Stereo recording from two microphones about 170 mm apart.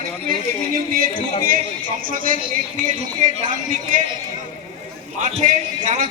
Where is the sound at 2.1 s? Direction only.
50° right (ahead or behind).